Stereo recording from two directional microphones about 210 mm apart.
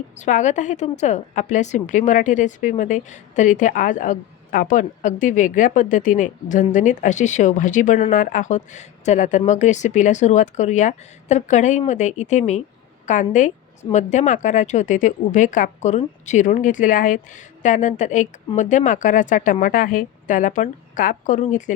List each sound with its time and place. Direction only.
0.2 s a woman's voice: 35° left (ahead or behind)